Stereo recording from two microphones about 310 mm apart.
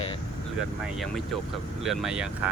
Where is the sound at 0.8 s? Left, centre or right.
Centre.